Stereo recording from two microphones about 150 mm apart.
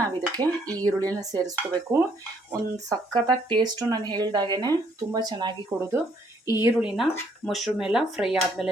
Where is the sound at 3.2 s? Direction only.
30° right (ahead or behind).